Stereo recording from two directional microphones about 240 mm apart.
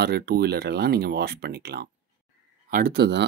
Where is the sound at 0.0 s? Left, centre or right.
Right.